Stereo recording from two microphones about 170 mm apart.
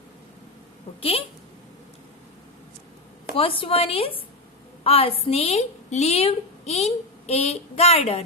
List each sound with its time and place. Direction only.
3.3 s a woman's voice: 30° left (ahead or behind)